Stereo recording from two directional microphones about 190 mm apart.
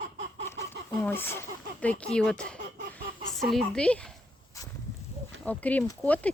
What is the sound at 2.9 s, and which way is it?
Chicken, centre (ahead or behind).